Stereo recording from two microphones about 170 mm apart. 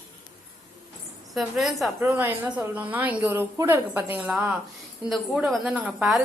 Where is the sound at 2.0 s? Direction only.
10° right (ahead or behind).